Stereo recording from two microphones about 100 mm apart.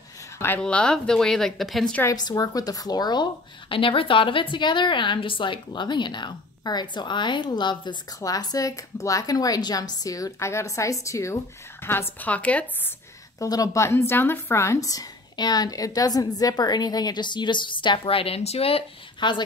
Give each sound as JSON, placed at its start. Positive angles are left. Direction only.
{"t": 0.6, "sound": "speech", "side_deg": 10}
{"t": 2.0, "sound": "a woman's voice", "side_deg": 40}
{"t": 13.4, "sound": "speech", "side_deg": 35}
{"t": 19.1, "sound": "a woman's voice", "side_deg": 50}